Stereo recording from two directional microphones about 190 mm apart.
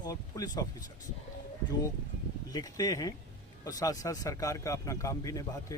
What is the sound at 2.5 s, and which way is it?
A man's voice, 20° left (ahead or behind).